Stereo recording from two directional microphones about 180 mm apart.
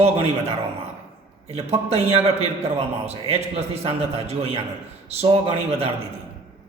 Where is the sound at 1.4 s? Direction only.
35° right (ahead or behind).